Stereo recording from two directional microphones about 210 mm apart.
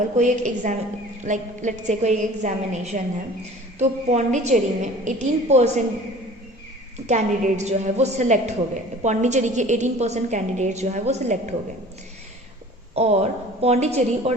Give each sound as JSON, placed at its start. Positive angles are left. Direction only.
{"t": 0.2, "sound": "a woman's voice", "side_deg": -35}
{"t": 7.1, "sound": "a woman's voice", "side_deg": -35}
{"t": 12.9, "sound": "a woman's voice", "side_deg": -30}